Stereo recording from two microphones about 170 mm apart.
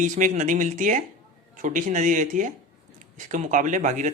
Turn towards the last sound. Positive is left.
turn(degrees=-45)  # may be behind; listen again after turning